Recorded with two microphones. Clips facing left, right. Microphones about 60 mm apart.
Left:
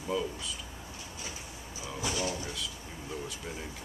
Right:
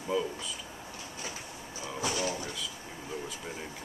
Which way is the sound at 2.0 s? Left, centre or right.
Centre.